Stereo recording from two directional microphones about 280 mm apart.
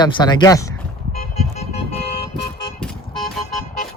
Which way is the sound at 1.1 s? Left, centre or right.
Left.